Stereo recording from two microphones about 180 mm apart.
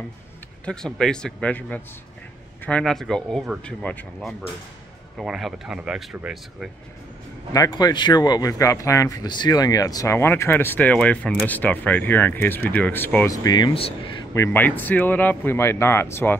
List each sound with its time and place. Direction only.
0.7 s speech: 5° left (ahead or behind)
7.5 s speech: 20° left (ahead or behind)
14.3 s speech: 15° left (ahead or behind)